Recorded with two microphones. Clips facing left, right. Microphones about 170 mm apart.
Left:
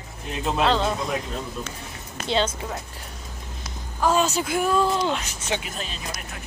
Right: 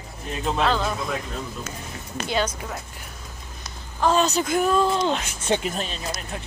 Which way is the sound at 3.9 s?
10° left (ahead or behind).